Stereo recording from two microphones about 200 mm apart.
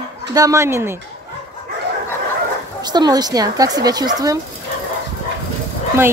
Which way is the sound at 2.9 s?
20° right (ahead or behind).